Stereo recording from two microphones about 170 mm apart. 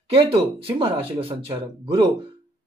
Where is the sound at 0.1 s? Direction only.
30° right (ahead or behind).